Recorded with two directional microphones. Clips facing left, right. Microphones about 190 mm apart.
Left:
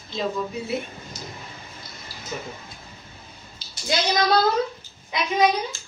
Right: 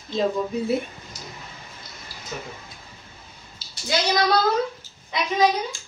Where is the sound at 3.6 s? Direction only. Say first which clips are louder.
Left 1 dB; 5° right (ahead or behind).